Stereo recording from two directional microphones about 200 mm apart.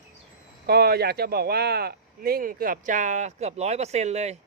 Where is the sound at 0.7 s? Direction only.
50° right (ahead or behind).